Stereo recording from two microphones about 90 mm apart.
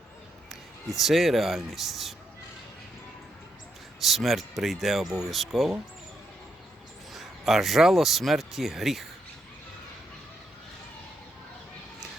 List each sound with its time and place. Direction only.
0.9 s speech: centre (ahead or behind)
4.0 s speech: centre (ahead or behind)
7.1 s speech: centre (ahead or behind)